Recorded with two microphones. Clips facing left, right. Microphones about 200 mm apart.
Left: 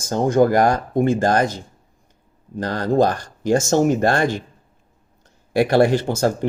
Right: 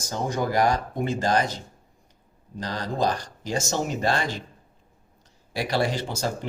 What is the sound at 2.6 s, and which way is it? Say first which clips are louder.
Speech: left 9 dB; 55° left (ahead or behind).